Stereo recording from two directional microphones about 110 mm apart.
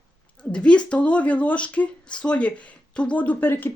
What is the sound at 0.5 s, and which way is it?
Speech, 10° left (ahead or behind).